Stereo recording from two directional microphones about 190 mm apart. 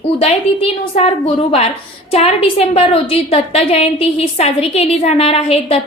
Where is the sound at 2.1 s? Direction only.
35° left (ahead or behind).